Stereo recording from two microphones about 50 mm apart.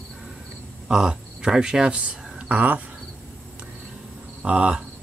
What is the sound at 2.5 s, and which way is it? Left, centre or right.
Speech, right.